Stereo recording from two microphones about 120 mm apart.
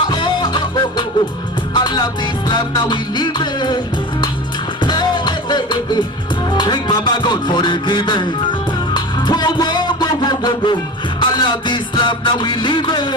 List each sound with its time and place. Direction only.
0.1 s music: 40° left (ahead or behind)